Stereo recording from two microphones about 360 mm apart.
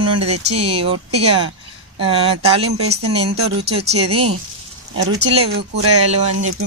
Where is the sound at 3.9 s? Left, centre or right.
Centre.